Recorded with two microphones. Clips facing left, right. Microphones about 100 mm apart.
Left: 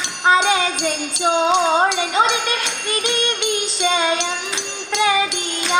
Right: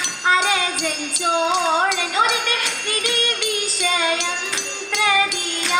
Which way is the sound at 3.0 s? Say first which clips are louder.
Left 2 dB; 25° left (ahead or behind).